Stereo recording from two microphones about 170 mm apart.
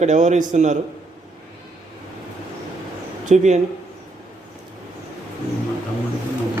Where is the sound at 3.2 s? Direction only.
45° right (ahead or behind).